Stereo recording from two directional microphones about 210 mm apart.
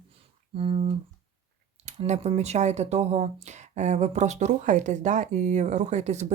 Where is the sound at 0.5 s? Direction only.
25° right (ahead or behind).